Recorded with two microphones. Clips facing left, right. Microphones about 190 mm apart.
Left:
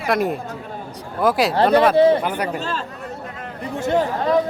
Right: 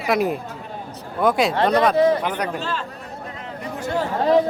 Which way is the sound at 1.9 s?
30° left (ahead or behind).